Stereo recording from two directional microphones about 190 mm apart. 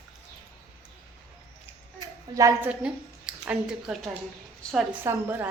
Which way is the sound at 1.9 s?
20° right (ahead or behind).